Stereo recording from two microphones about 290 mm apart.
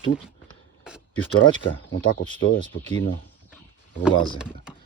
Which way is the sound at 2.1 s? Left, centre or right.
Left.